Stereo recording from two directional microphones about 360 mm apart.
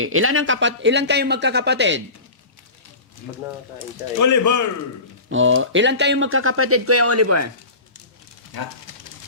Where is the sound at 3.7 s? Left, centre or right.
Left.